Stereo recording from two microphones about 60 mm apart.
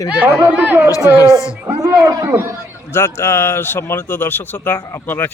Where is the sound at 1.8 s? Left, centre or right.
Right.